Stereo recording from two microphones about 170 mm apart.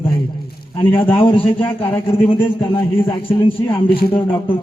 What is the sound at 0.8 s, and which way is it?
A man's voice, 30° left (ahead or behind).